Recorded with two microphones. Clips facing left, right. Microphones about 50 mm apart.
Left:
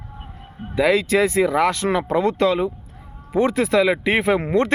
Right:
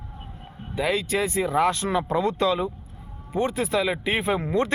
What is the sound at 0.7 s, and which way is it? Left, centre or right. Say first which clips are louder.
Speech: left 7 dB; left.